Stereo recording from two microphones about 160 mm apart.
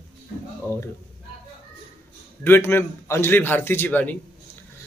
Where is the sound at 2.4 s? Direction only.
15° left (ahead or behind).